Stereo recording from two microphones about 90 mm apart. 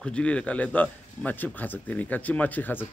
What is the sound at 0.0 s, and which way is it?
A man's voice, 10° left (ahead or behind).